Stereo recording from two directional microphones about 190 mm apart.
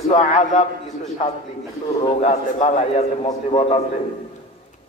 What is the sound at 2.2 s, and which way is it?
A man's voice, 35° left (ahead or behind).